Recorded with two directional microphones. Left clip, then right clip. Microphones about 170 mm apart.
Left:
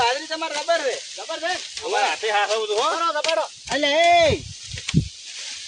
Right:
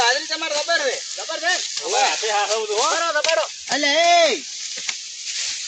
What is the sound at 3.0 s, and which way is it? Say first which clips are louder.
Speech: right 2 dB; 45° left (ahead or behind).